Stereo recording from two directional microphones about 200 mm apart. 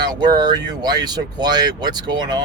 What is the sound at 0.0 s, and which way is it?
Speech, 20° right (ahead or behind).